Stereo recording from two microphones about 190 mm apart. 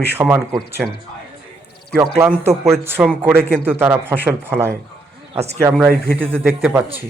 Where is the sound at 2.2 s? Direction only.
10° right (ahead or behind).